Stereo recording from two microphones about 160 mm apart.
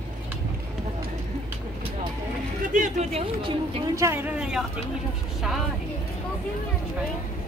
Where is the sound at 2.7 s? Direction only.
50° right (ahead or behind).